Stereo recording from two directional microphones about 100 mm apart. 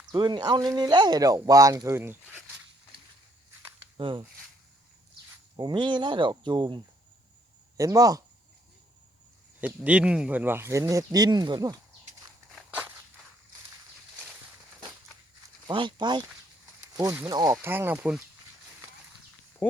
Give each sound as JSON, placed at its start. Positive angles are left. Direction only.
{"t": 0.0, "sound": "speech", "side_deg": -45}
{"t": 3.9, "sound": "speech", "side_deg": -60}
{"t": 5.5, "sound": "speech", "side_deg": -50}
{"t": 7.8, "sound": "speech", "side_deg": -35}
{"t": 9.6, "sound": "speech", "side_deg": -15}
{"t": 15.6, "sound": "speech", "side_deg": -50}
{"t": 17.2, "sound": "speech", "side_deg": -40}
{"t": 17.5, "sound": "speech", "side_deg": -20}